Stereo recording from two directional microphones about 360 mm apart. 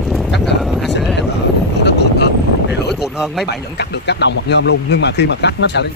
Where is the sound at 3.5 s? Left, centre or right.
Left.